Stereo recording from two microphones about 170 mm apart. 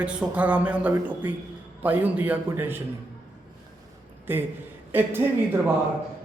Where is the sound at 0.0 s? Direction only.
10° right (ahead or behind).